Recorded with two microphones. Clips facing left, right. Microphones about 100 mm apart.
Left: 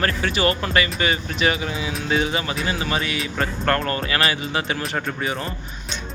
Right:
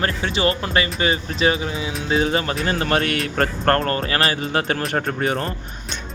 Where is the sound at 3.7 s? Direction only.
40° right (ahead or behind).